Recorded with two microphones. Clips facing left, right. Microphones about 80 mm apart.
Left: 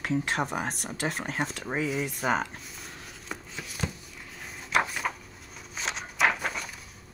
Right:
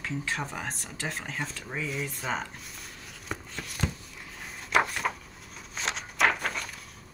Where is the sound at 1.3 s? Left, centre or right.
Left.